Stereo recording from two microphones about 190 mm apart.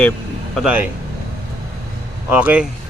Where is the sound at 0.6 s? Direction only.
10° right (ahead or behind).